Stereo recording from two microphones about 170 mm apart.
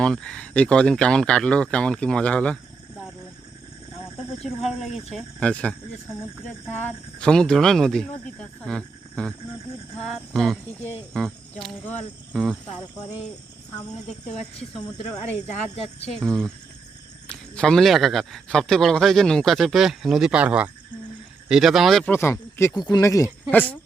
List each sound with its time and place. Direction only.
0.0 s a man's voice: 5° left (ahead or behind)
4.4 s a man's voice: centre (ahead or behind)
12.3 s a man's voice: 5° right (ahead or behind)
16.0 s a man's voice: 5° left (ahead or behind)
22.1 s speech: 15° left (ahead or behind)